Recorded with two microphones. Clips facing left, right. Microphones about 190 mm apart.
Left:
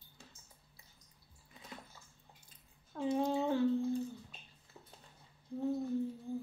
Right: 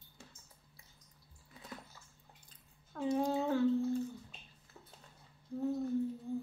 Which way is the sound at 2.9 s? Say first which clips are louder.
Even; 20° left (ahead or behind).